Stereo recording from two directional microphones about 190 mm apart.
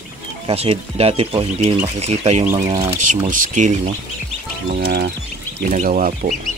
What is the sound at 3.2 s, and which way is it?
Speech, 40° right (ahead or behind).